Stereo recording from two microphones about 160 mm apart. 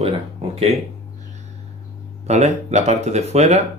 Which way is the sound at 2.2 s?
45° right (ahead or behind).